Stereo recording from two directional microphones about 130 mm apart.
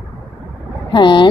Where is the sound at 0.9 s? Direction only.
35° left (ahead or behind).